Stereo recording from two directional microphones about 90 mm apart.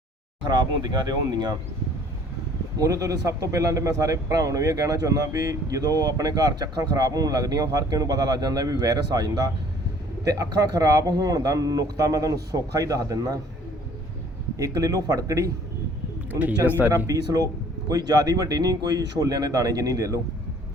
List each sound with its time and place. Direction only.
0.4 s speech: 50° right (ahead or behind)
2.7 s speech: 40° right (ahead or behind)
14.6 s speech: 40° right (ahead or behind)
16.3 s speech: 20° right (ahead or behind)
17.1 s speech: 40° right (ahead or behind)